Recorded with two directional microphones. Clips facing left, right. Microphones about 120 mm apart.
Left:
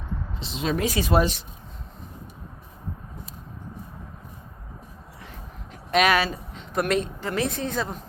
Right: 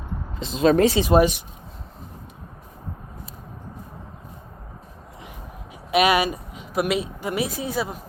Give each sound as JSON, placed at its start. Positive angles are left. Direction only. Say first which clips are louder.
{"t": 0.6, "sound": "speech", "louder": "right 9 dB", "side_deg": -45}
{"t": 0.9, "sound": "speech", "louder": "right 5 dB", "side_deg": -20}
{"t": 5.9, "sound": "a woman's voice", "louder": "right 2 dB", "side_deg": -10}